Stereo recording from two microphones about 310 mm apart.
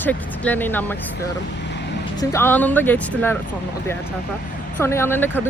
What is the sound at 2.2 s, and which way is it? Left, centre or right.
Speech, centre.